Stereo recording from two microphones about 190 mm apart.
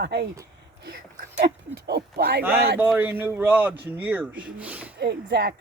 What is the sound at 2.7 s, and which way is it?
Speech, 10° right (ahead or behind).